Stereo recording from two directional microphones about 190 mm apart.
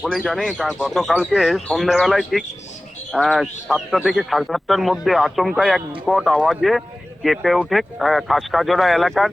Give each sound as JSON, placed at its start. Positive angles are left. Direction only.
{"t": 0.0, "sound": "speech", "side_deg": 0}